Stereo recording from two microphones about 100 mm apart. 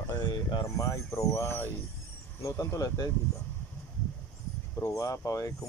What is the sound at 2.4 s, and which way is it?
Speech, 35° left (ahead or behind).